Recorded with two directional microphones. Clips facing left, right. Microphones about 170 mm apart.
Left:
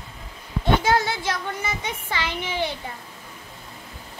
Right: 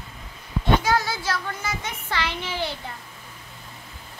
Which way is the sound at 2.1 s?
15° left (ahead or behind).